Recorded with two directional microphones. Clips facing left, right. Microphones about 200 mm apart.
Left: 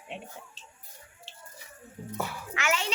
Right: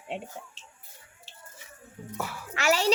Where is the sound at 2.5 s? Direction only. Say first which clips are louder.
Right 5 dB; 35° right (ahead or behind).